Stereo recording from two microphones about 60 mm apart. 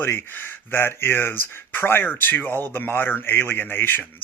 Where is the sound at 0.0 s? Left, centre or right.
Left.